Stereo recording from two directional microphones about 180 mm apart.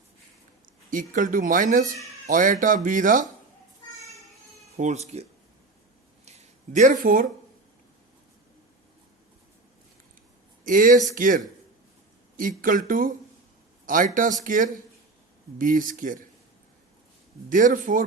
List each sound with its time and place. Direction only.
0.9 s speech: 45° right (ahead or behind)
4.8 s speech: 40° right (ahead or behind)
6.2 s a sound: 40° right (ahead or behind)
10.6 s speech: 50° right (ahead or behind)
17.5 s speech: 45° right (ahead or behind)